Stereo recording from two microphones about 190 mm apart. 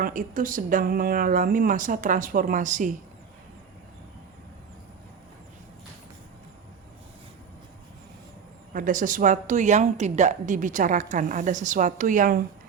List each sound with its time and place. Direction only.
0.0 s a woman's voice: 45° right (ahead or behind)
8.7 s a woman's voice: 45° right (ahead or behind)